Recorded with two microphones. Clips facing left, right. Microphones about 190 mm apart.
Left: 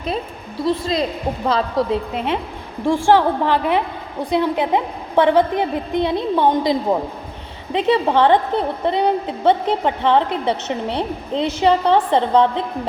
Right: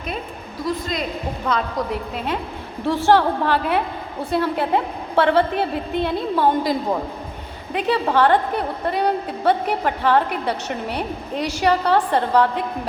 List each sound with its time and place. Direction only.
0.6 s a woman's voice: 30° left (ahead or behind)
2.8 s a woman's voice: 15° left (ahead or behind)